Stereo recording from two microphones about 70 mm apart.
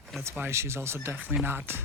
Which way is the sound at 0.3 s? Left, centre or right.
Right.